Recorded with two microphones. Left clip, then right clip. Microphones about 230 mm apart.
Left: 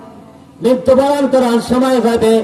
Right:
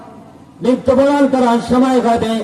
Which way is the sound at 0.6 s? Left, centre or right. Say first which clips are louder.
Left 2 dB; left.